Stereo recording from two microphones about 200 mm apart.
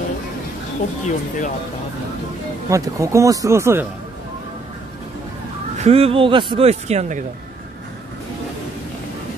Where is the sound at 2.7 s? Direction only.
15° right (ahead or behind).